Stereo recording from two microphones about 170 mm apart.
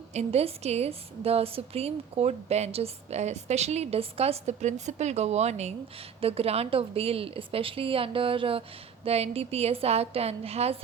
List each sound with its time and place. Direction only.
0.1 s a woman's voice: 40° right (ahead or behind)